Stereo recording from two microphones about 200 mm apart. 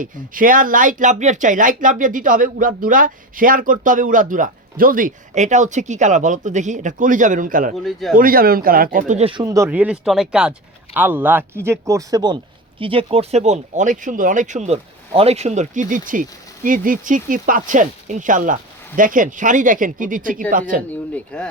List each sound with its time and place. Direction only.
0.0 s speech: 45° right (ahead or behind)
21.3 s speech: 5° left (ahead or behind)